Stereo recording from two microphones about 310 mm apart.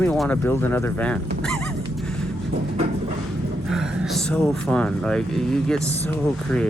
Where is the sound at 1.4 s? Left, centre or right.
Centre.